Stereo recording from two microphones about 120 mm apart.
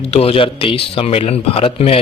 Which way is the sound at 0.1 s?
55° left (ahead or behind).